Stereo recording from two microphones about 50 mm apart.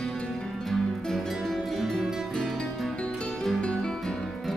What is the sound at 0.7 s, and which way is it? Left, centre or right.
Music, centre.